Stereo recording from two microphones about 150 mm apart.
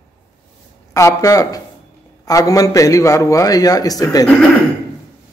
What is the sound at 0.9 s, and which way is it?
A man's voice, 20° left (ahead or behind).